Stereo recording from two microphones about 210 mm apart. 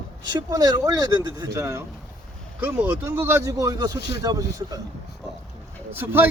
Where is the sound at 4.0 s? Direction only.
50° left (ahead or behind).